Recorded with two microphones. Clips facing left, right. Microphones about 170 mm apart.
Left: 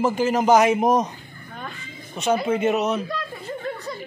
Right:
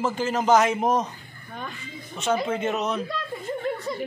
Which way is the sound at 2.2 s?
10° left (ahead or behind).